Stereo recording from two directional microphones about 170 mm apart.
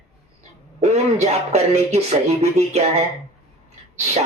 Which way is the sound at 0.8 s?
40° right (ahead or behind).